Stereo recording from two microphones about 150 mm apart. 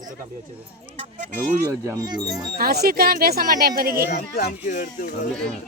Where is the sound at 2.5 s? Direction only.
85° right.